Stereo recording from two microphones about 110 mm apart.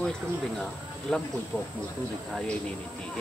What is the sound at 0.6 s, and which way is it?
Speech, 5° left (ahead or behind).